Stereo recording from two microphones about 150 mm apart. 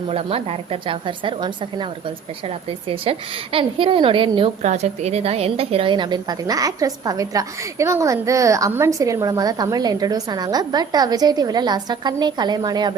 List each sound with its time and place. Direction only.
0.1 s a woman's voice: 40° right (ahead or behind)
4.6 s a woman's voice: 50° right (ahead or behind); by 12.9 s 30° right (ahead or behind)